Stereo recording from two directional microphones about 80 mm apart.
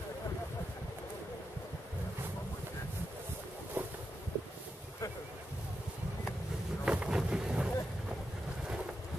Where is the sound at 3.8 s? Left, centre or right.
Right.